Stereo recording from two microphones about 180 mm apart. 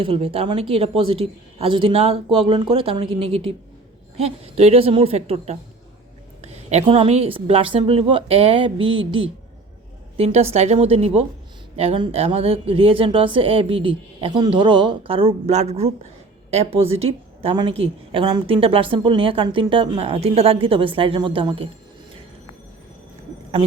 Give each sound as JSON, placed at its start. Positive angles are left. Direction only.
{"t": 0.0, "sound": "a woman's voice", "side_deg": -30}